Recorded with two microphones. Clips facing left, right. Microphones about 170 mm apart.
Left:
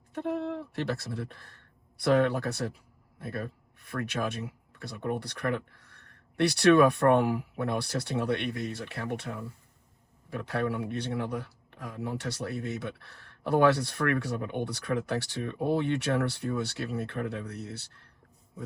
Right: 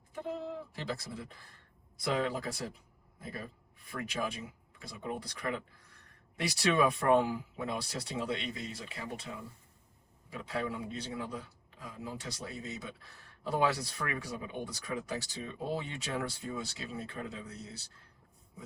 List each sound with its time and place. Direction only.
0.1 s a man's voice: 70° left (ahead or behind)